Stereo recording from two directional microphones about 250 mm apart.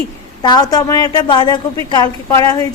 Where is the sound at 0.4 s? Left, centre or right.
Centre.